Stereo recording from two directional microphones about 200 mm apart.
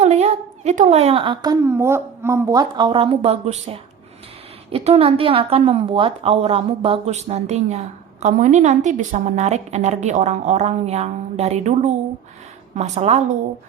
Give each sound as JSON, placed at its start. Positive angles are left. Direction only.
{"t": 0.0, "sound": "a woman's voice", "side_deg": -35}